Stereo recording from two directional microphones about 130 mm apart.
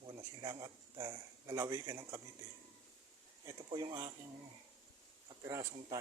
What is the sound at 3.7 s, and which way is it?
Speech, 30° right (ahead or behind).